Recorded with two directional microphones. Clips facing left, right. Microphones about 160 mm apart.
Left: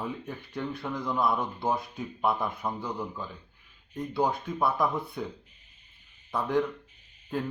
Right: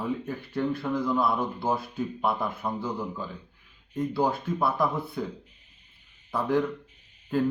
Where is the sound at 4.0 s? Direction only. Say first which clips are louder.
Right 2 dB; 5° right (ahead or behind).